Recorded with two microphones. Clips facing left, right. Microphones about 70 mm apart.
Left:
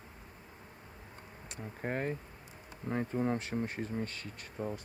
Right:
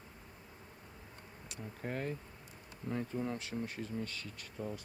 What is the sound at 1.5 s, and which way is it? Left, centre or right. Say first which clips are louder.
Speech: left 4 dB; left.